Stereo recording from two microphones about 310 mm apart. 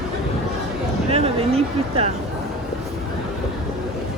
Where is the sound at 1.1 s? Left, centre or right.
Centre.